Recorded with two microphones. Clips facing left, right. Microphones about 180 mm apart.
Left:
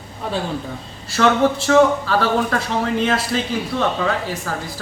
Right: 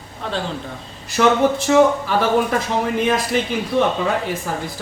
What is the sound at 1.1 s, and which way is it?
A man's voice, 15° right (ahead or behind).